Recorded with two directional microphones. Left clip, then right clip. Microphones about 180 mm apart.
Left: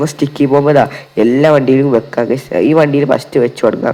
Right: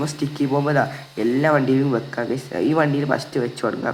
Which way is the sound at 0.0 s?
35° left (ahead or behind).